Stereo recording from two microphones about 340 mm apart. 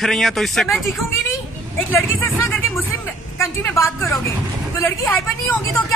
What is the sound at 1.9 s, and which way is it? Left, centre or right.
Vehicle, centre.